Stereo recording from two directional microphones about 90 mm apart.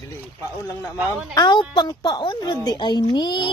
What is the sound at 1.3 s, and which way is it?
Speech, 50° left (ahead or behind).